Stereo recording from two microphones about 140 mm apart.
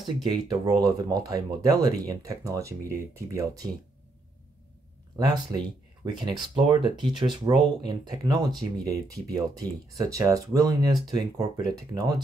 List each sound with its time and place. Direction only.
0.0 s speech: 30° right (ahead or behind)
5.1 s speech: 30° right (ahead or behind)